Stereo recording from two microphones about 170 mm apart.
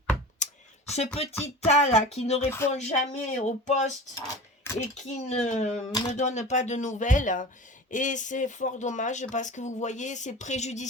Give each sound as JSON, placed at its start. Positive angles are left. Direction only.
{"t": 0.4, "sound": "a sound", "side_deg": 45}
{"t": 0.9, "sound": "speech", "side_deg": 35}
{"t": 4.9, "sound": "speech", "side_deg": 45}